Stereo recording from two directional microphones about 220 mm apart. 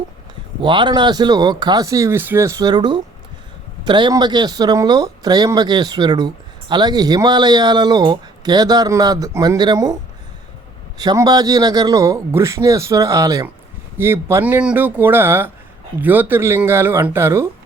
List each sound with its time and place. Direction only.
0.6 s speech: 20° right (ahead or behind)